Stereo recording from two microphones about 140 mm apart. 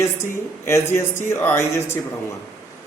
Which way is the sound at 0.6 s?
15° left (ahead or behind).